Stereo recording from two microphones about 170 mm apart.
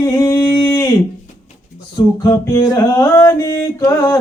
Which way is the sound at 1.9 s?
20° left (ahead or behind).